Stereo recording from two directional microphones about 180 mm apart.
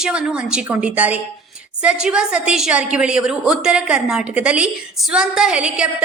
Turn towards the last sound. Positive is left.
turn(degrees=-5)  # may be behind; listen again after turning